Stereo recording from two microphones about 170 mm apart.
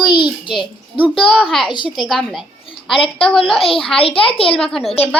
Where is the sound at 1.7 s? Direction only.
25° left (ahead or behind).